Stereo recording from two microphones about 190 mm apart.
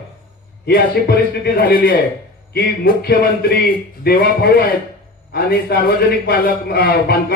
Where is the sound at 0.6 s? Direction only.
55° left (ahead or behind).